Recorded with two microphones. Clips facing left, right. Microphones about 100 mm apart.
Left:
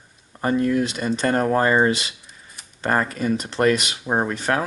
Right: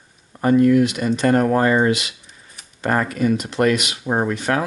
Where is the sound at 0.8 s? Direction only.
35° left (ahead or behind).